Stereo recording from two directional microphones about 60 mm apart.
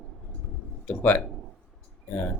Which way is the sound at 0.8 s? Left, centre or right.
Left.